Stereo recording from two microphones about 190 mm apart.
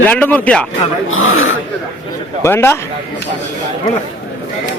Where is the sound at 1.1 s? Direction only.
90° left.